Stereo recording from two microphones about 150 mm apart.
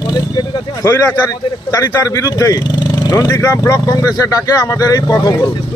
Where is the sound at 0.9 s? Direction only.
15° left (ahead or behind).